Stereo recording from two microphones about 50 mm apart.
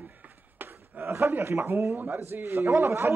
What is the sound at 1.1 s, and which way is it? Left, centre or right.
Speech, right.